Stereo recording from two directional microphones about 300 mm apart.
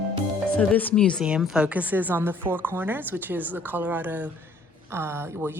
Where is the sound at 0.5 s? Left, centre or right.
Centre.